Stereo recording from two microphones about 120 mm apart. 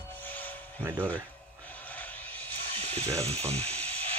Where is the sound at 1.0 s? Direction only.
15° left (ahead or behind).